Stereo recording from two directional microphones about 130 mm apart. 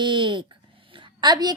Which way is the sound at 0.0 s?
40° right (ahead or behind).